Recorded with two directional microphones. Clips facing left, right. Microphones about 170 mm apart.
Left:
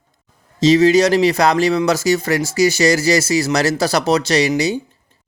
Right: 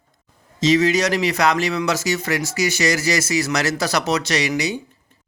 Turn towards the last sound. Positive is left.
turn(degrees=30)  # may be behind; listen again after turning